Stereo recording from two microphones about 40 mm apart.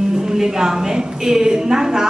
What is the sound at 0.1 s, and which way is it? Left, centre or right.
Speech, centre.